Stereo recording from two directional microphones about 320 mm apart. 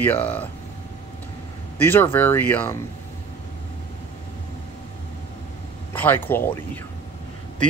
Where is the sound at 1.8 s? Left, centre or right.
Centre.